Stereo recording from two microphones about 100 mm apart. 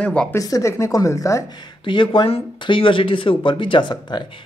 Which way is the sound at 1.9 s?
55° left (ahead or behind).